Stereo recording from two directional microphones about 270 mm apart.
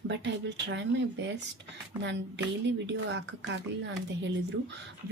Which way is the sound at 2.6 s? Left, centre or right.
Right.